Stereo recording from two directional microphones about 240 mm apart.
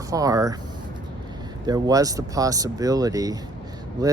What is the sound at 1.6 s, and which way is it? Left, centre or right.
Speech, centre.